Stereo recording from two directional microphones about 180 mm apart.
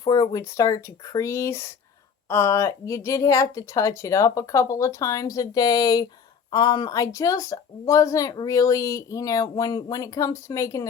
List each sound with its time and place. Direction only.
0.0 s a woman's voice: 20° left (ahead or behind)